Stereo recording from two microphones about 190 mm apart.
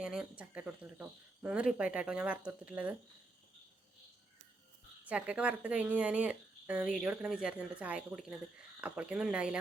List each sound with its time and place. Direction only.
0.0 s speech: 5° right (ahead or behind)
5.0 s speech: 5° right (ahead or behind)